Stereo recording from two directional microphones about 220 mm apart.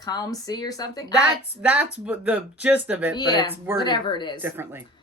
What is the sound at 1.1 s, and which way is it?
Speech, 5° right (ahead or behind).